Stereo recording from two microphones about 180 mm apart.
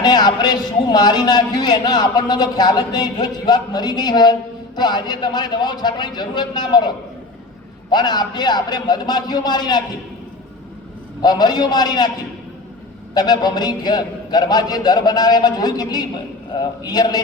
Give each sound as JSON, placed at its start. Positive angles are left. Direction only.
{"t": 0.0, "sound": "a man's voice", "side_deg": 25}
{"t": 11.2, "sound": "a man's voice", "side_deg": 25}
{"t": 13.1, "sound": "a man's voice", "side_deg": 20}